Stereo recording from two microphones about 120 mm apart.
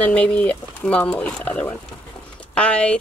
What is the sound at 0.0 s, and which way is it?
Speech, 10° left (ahead or behind).